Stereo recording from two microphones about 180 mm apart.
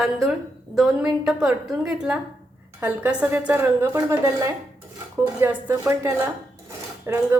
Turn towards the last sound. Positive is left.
turn(degrees=-15)  # may be behind; listen again after turning